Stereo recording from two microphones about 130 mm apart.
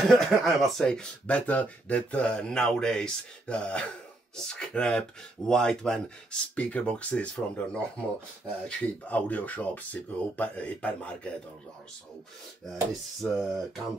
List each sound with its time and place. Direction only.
0.0 s speech: centre (ahead or behind)
13.2 s speech: centre (ahead or behind)